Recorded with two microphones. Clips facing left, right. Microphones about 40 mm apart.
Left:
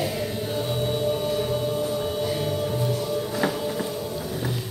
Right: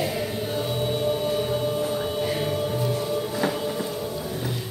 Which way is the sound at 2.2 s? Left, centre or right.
Right.